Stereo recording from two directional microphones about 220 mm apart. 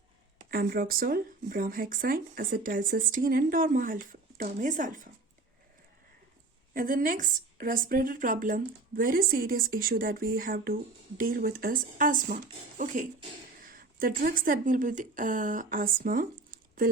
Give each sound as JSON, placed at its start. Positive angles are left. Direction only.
{"t": 0.5, "sound": "speech", "side_deg": -45}
{"t": 6.7, "sound": "speech", "side_deg": -40}